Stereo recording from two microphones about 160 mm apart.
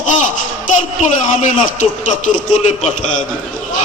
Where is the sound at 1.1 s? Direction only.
50° left (ahead or behind).